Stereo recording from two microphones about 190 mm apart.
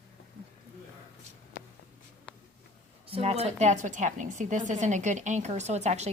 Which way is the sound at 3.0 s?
30° right (ahead or behind).